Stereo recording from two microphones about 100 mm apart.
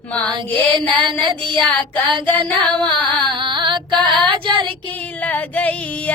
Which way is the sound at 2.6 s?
15° left (ahead or behind).